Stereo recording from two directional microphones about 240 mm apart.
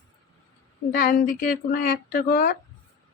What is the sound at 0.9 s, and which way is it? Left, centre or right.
Speech, left.